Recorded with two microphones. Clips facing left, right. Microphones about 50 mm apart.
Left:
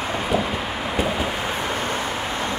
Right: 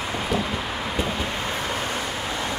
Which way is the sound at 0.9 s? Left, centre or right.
Centre.